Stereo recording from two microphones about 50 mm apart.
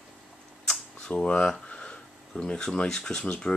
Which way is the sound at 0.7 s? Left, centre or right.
Centre.